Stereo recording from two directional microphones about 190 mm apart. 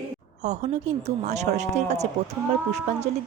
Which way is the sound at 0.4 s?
35° right (ahead or behind).